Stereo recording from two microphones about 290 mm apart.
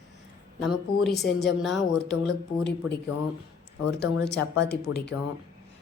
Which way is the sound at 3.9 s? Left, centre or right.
Left.